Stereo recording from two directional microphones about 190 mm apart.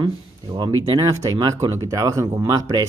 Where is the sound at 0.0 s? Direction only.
20° right (ahead or behind).